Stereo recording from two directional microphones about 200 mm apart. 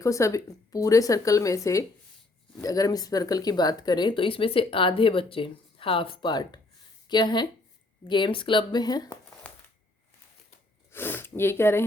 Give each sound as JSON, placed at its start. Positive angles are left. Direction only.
{"t": 0.0, "sound": "speech", "side_deg": 15}
{"t": 10.9, "sound": "speech", "side_deg": 10}